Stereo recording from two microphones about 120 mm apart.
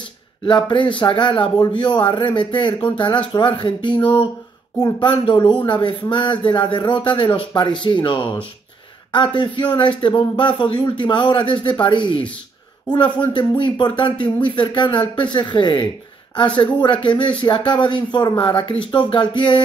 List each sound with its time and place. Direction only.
0.5 s speech: 40° left (ahead or behind)
4.7 s speech: 30° left (ahead or behind)